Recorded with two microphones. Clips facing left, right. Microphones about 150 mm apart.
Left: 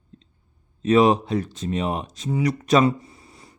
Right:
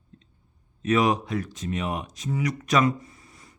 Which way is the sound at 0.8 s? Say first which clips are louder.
Left 5 dB; 30° left (ahead or behind).